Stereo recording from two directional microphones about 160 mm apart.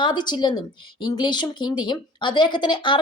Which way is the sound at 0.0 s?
30° left (ahead or behind).